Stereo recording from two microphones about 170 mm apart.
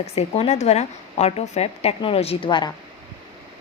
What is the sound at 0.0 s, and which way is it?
A woman's voice, 35° left (ahead or behind).